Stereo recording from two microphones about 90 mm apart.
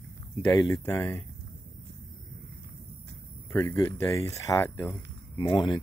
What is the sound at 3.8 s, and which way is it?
Speech, 25° left (ahead or behind).